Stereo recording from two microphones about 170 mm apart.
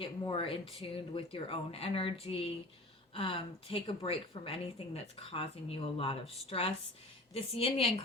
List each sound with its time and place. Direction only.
0.2 s a woman's voice: 30° left (ahead or behind)